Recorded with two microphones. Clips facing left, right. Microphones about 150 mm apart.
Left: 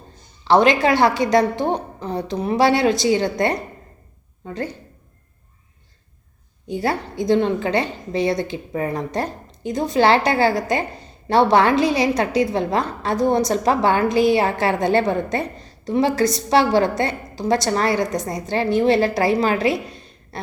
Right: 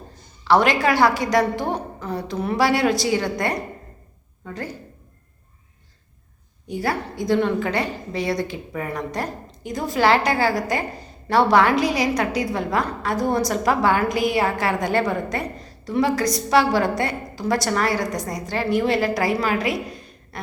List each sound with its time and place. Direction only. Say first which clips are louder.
0.4 s a woman's voice: left 3 dB; 25° left (ahead or behind)
6.7 s a woman's voice: left 2 dB; 25° left (ahead or behind)